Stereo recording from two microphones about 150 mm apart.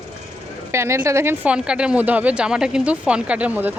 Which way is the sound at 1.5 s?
5° right (ahead or behind).